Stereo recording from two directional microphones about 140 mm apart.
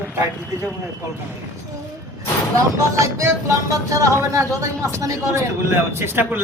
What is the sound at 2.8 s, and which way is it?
A woman's voice, 20° right (ahead or behind).